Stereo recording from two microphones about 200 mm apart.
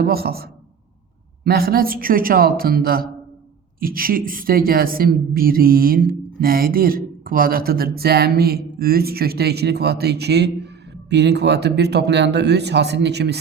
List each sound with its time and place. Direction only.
0.0 s a woman's voice: 50° right (ahead or behind)